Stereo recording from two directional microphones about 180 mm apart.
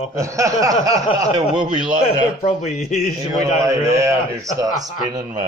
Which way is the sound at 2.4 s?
35° left (ahead or behind).